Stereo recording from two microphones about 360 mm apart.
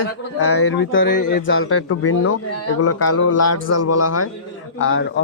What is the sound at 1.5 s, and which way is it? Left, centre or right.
Speech, left.